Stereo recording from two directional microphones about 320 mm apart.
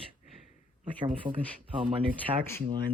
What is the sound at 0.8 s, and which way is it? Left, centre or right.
Speech, centre.